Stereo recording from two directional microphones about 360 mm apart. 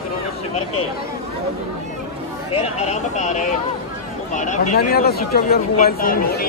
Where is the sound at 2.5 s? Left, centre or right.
Centre.